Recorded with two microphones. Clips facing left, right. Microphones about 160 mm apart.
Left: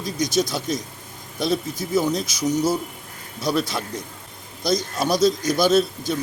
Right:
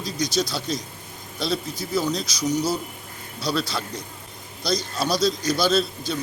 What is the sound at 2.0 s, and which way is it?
A man's voice, 20° left (ahead or behind).